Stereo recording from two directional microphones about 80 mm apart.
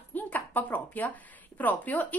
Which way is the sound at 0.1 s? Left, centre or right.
Left.